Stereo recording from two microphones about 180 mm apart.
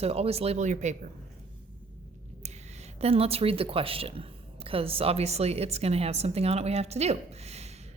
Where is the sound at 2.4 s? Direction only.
40° right (ahead or behind).